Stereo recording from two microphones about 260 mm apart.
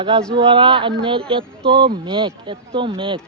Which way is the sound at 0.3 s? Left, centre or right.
Centre.